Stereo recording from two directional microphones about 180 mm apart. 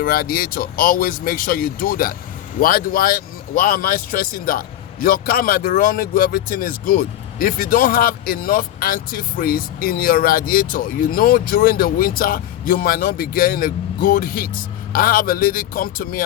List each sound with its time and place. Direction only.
0.0 s a man's voice: 55° left (ahead or behind)